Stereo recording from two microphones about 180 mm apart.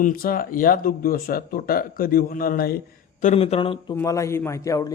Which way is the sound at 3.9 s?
15° left (ahead or behind).